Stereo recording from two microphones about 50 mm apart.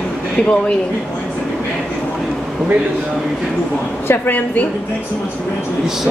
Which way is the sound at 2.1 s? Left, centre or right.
Centre.